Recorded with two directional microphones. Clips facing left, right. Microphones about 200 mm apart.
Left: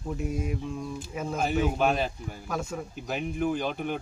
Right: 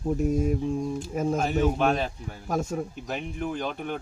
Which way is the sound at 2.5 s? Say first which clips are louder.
Right 5 dB; 45° right (ahead or behind).